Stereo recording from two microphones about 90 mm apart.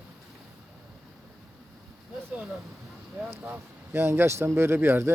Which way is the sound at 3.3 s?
25° right (ahead or behind).